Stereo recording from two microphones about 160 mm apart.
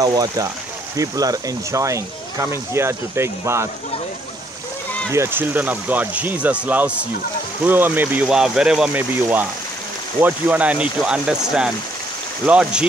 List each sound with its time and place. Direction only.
0.0 s speech: 25° right (ahead or behind)
5.1 s speech: 15° right (ahead or behind)